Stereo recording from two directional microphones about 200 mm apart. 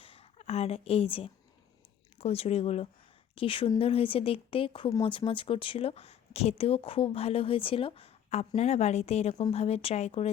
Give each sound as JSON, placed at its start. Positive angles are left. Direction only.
{"t": 0.0, "sound": "speech", "side_deg": 30}